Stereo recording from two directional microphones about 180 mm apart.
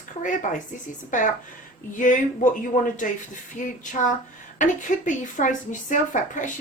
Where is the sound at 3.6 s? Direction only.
45° left (ahead or behind).